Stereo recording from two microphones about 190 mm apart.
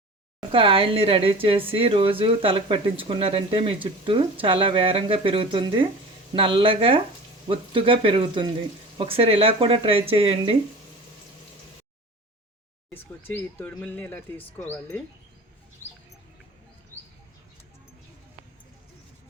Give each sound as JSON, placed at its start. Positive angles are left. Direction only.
{"t": 0.3, "sound": "speech", "side_deg": -25}
{"t": 12.9, "sound": "speech", "side_deg": 10}